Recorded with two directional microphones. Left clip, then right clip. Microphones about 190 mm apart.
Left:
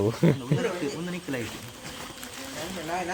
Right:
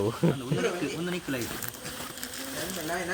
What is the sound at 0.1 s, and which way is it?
Speech, 40° left (ahead or behind).